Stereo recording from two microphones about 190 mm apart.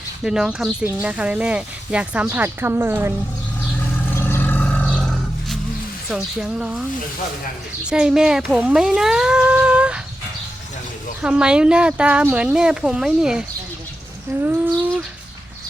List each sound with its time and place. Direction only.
0.2 s speech: 5° right (ahead or behind)
4.1 s roar: 10° left (ahead or behind)
6.1 s speech: 5° right (ahead or behind)
7.9 s speech: 5° right (ahead or behind)
11.2 s speech: 5° right (ahead or behind)
14.4 s speech: 10° right (ahead or behind)